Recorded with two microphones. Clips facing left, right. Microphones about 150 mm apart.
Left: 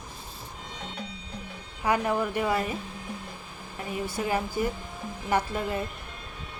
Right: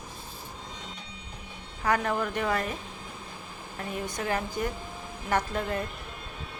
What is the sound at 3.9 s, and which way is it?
Speech, 5° left (ahead or behind).